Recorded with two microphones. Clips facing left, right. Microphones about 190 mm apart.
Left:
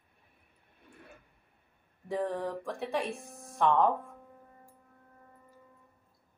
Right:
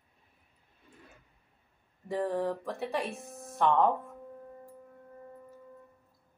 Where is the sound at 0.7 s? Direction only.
60° left (ahead or behind).